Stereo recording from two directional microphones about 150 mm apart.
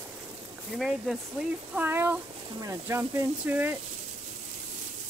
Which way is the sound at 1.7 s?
15° right (ahead or behind).